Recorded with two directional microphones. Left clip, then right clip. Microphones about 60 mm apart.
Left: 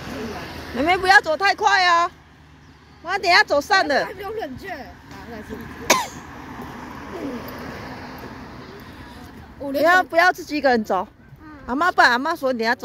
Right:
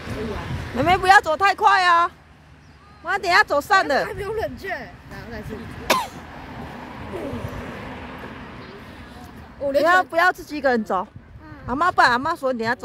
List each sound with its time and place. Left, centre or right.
0.0 s a sound: left
0.7 s speech: centre
4.1 s speech: left
5.4 s speech: centre
5.9 s cough: left
6.7 s vehicle: left
7.8 s vehicle: left
9.8 s speech: left
12.4 s speech: left